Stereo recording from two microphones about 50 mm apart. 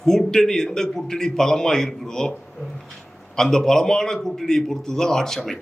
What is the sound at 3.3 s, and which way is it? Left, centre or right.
A man's voice, centre.